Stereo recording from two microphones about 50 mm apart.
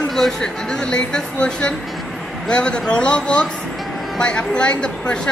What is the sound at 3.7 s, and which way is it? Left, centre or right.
Music, centre.